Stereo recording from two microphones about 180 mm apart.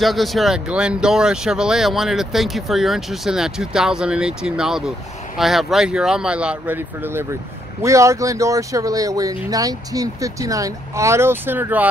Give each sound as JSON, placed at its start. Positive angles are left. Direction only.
{"t": 0.0, "sound": "speech", "side_deg": 0}